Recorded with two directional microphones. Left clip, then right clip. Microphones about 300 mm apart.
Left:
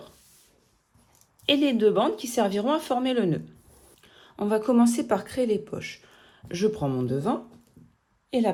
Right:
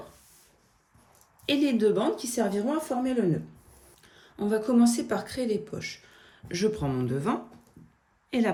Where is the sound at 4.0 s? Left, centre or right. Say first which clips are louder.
Left 2 dB; centre.